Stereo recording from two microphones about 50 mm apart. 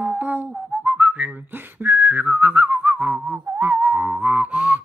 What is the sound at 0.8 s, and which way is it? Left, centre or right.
Whistling, right.